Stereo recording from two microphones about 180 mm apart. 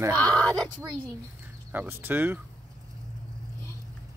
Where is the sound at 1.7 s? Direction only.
10° right (ahead or behind).